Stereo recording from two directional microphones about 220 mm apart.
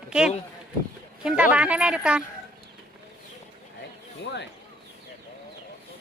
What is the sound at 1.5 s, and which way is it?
Speech, 5° right (ahead or behind).